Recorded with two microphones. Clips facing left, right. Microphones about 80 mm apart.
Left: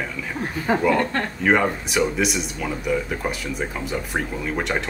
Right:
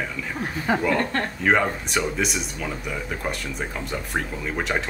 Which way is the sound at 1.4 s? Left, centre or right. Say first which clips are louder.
Left 2 dB; centre.